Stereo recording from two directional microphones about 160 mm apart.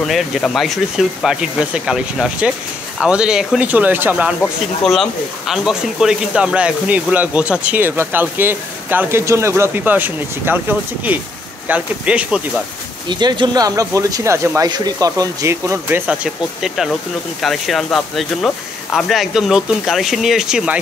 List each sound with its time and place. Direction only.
0.0 s speech: centre (ahead or behind)
4.4 s speech: centre (ahead or behind)
13.1 s speech: 25° right (ahead or behind)
16.6 s speech: centre (ahead or behind)